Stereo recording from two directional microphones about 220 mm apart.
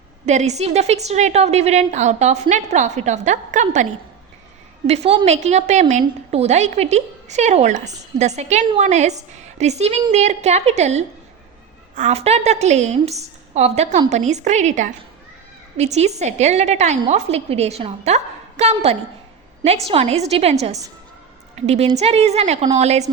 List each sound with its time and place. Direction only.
0.3 s a woman's voice: 30° right (ahead or behind)
4.9 s a woman's voice: 30° right (ahead or behind)